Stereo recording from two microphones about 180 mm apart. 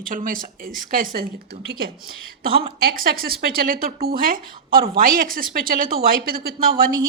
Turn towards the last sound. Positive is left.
turn(degrees=-55)  # may be behind; listen again after turning